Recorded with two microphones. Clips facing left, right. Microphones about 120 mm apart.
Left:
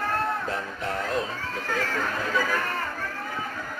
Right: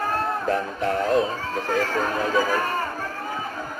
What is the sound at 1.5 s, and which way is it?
Battle cry, 40° right (ahead or behind).